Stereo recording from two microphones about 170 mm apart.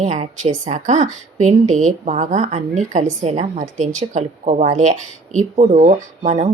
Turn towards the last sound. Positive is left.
turn(degrees=-40)  # may be behind; listen again after turning